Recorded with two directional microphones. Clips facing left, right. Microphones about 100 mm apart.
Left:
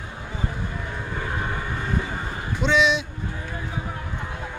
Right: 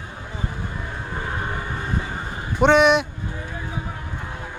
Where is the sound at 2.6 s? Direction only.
55° right (ahead or behind).